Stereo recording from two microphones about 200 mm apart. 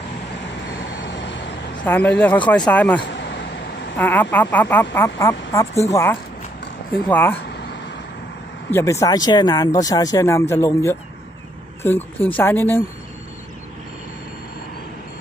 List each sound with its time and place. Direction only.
1.0 s vehicle: 65° left (ahead or behind)
1.8 s speech: 10° left (ahead or behind)
3.0 s a sound: 60° left (ahead or behind)
3.9 s speech: 10° left (ahead or behind)
8.7 s speech: 15° left (ahead or behind)